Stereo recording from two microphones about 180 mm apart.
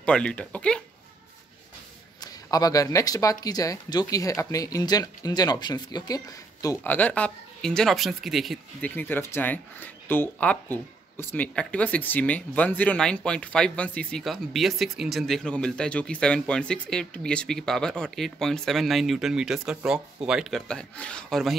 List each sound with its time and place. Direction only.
0.0 s speech: 5° left (ahead or behind)
2.2 s speech: 20° left (ahead or behind); by 8.9 s centre (ahead or behind)
8.9 s speech: 10° left (ahead or behind)